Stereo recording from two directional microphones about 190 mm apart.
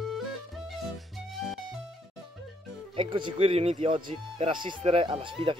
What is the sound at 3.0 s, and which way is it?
Speech, 25° right (ahead or behind).